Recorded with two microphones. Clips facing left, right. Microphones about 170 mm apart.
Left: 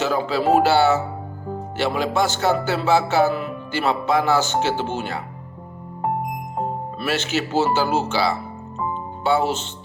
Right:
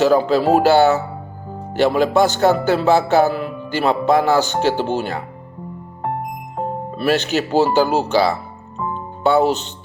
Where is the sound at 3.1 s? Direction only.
40° right (ahead or behind).